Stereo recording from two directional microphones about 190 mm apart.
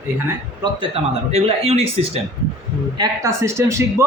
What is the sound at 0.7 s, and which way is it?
Speech, 30° right (ahead or behind).